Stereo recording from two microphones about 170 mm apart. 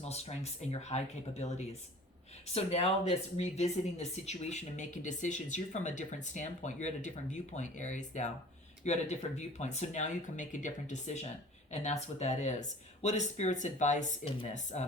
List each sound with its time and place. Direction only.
0.0 s speech: 40° left (ahead or behind)